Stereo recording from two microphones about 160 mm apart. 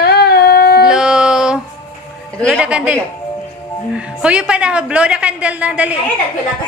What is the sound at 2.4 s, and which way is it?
Speech, 5° right (ahead or behind).